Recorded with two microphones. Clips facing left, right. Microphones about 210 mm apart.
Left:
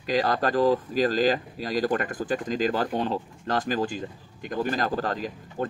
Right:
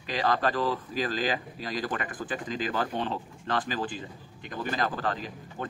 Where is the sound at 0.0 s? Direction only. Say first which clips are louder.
Left 3 dB; 40° left (ahead or behind).